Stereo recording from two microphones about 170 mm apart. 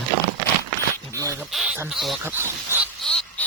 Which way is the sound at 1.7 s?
15° right (ahead or behind).